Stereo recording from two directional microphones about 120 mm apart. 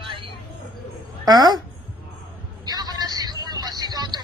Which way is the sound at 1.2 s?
35° right (ahead or behind).